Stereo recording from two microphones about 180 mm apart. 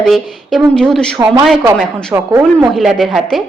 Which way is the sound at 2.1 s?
15° right (ahead or behind).